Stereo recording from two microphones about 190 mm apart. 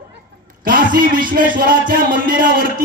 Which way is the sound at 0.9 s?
50° right (ahead or behind).